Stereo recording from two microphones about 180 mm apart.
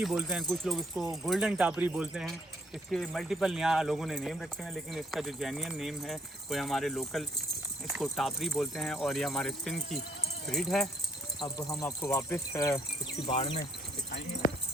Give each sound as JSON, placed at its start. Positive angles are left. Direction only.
{"t": 0.0, "sound": "speech", "side_deg": -5}
{"t": 11.3, "sound": "speech", "side_deg": 20}
{"t": 13.2, "sound": "speech", "side_deg": 30}